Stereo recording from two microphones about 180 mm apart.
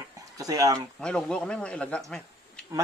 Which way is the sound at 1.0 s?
5° left (ahead or behind).